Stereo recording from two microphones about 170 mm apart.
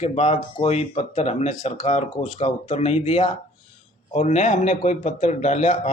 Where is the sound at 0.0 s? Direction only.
40° left (ahead or behind).